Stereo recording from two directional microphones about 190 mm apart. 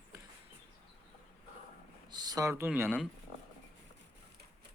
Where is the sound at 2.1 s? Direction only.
20° right (ahead or behind).